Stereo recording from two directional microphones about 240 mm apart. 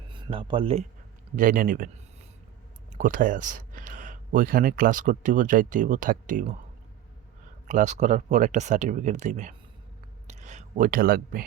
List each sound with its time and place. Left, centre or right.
0.1 s speech: right
1.4 s speech: right
3.0 s speech: right
7.7 s speech: right
10.2 s a sound: right